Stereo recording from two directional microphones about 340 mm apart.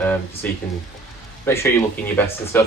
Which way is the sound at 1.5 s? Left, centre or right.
Centre.